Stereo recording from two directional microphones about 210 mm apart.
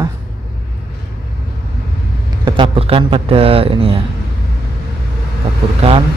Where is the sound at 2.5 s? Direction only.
25° right (ahead or behind).